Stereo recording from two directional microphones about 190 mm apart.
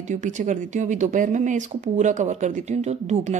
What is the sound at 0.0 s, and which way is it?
Speech, 40° right (ahead or behind).